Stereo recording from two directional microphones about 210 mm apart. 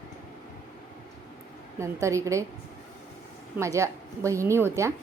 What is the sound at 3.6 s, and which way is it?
A woman's voice, 15° right (ahead or behind).